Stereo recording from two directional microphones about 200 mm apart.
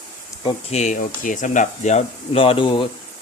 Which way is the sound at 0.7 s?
35° left (ahead or behind).